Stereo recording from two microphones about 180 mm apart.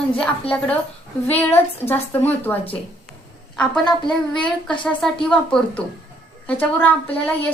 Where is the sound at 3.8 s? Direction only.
25° left (ahead or behind).